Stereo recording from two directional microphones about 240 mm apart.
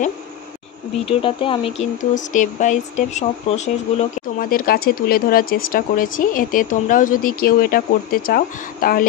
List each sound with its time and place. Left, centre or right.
1.0 s speech: left